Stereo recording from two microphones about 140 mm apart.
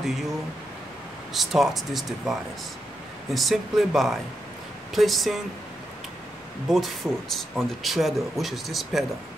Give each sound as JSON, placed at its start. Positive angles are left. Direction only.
{"t": 0.0, "sound": "speech", "side_deg": 0}
{"t": 1.3, "sound": "speech", "side_deg": 0}
{"t": 3.3, "sound": "speech", "side_deg": 0}
{"t": 6.7, "sound": "speech", "side_deg": 0}